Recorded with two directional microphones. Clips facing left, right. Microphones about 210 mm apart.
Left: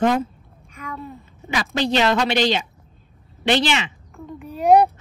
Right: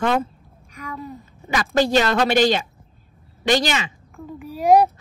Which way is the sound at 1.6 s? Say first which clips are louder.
Right 2 dB; 45° right (ahead or behind).